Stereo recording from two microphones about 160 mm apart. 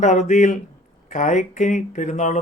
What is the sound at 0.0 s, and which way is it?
Speech, 45° left (ahead or behind).